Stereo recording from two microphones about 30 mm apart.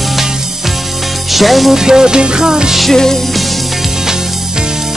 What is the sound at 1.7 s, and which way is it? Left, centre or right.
Music, centre.